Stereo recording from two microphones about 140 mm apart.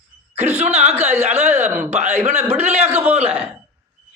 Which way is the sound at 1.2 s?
50° right (ahead or behind).